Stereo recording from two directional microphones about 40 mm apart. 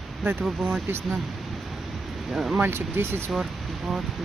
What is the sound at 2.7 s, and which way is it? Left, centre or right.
Speech, right.